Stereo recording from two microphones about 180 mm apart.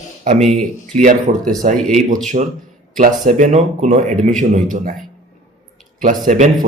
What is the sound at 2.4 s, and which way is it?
A man's voice, 40° right (ahead or behind).